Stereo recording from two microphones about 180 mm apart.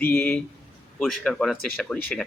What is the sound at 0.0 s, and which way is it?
Speech, 5° left (ahead or behind).